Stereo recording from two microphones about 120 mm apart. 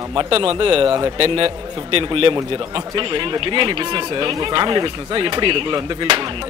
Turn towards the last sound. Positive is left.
turn(degrees=-40)  # may be behind; listen again after turning